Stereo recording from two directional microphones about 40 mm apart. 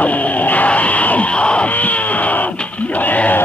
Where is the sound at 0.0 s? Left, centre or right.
Left.